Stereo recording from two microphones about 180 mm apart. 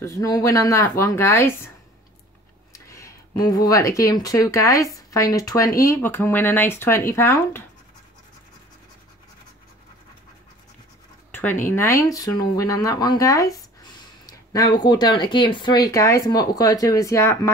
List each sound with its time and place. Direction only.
0.0 s speech: 15° left (ahead or behind)
2.7 s speech: 15° left (ahead or behind)
11.3 s speech: 10° left (ahead or behind)